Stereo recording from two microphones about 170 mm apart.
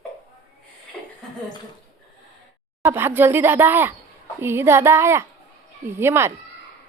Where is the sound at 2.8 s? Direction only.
15° right (ahead or behind).